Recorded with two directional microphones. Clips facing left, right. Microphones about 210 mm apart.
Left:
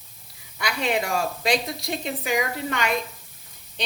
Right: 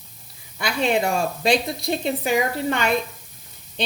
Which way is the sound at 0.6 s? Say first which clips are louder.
Right 4 dB; 30° right (ahead or behind).